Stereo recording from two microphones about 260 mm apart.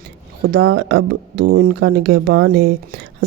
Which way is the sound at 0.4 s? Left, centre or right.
Right.